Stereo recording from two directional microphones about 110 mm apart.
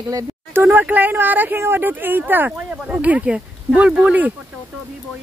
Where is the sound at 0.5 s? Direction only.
15° right (ahead or behind).